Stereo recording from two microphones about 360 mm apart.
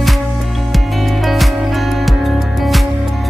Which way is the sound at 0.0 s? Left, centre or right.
Centre.